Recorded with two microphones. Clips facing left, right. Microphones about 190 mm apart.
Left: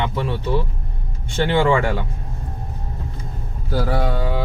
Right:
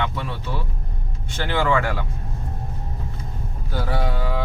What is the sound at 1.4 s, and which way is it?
Speech, 25° left (ahead or behind).